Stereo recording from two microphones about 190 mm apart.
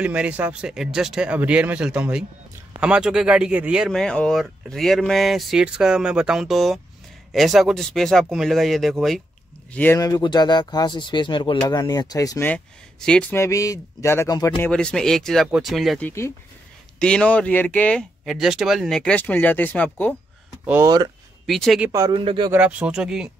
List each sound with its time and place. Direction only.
0.0 s speech: 5° right (ahead or behind); by 14.7 s 20° left (ahead or behind)
14.7 s speech: 5° left (ahead or behind)
16.1 s speech: 15° left (ahead or behind)
20.6 s speech: 15° right (ahead or behind)
21.5 s speech: centre (ahead or behind)
21.9 s speech: 25° right (ahead or behind)
22.5 s speech: 5° right (ahead or behind)